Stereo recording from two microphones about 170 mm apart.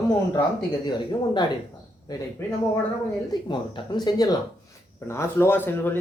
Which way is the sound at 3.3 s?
25° left (ahead or behind).